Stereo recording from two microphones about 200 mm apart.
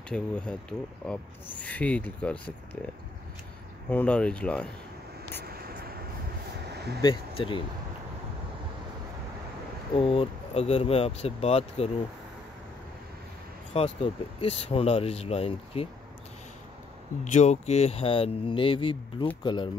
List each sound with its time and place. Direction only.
0.1 s speech: 5° left (ahead or behind)
3.9 s speech: 5° left (ahead or behind)
5.5 s a sound: 50° right (ahead or behind)
7.0 s speech: 25° left (ahead or behind)
9.9 s speech: 30° left (ahead or behind)
13.7 s speech: 30° left (ahead or behind)
17.2 s speech: 35° left (ahead or behind)